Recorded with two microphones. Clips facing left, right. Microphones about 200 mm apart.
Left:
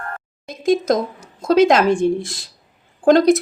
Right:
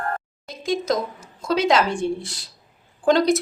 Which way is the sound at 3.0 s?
50° left (ahead or behind).